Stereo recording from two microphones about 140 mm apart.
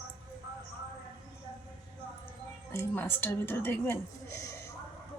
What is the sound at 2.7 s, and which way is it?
A woman's voice, 15° left (ahead or behind).